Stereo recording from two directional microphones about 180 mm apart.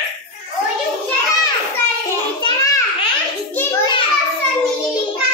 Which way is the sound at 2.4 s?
20° left (ahead or behind).